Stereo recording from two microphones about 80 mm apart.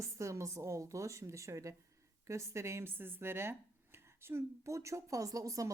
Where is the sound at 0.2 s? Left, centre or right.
Right.